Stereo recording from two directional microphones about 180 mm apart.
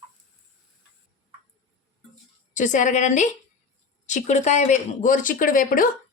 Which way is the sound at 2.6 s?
45° left (ahead or behind).